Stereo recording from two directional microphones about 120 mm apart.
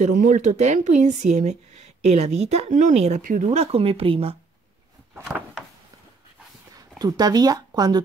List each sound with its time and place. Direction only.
0.0 s speech: 90° right; by 4.4 s 50° right (ahead or behind)
5.3 s a sound: 5° right (ahead or behind)
7.0 s speech: 35° right (ahead or behind)